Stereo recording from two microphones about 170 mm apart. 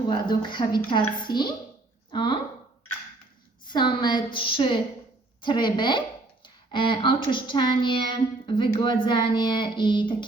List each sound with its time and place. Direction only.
0.1 s speech: 25° left (ahead or behind)
3.7 s speech: 25° left (ahead or behind)